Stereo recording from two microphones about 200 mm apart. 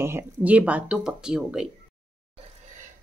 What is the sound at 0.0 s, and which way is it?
Speech, 10° right (ahead or behind).